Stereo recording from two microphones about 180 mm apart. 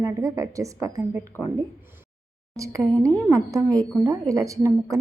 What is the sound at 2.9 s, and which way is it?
Speech, 5° left (ahead or behind).